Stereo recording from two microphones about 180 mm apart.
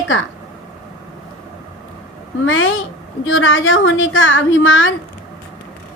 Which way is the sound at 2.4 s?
90° left.